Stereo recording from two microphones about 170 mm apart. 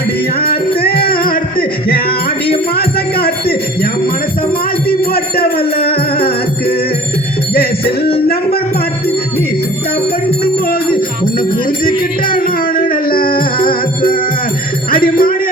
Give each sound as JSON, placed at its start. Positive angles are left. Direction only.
{"t": 0.4, "sound": "music", "side_deg": 65}
{"t": 4.9, "sound": "music", "side_deg": 65}
{"t": 11.9, "sound": "music", "side_deg": 55}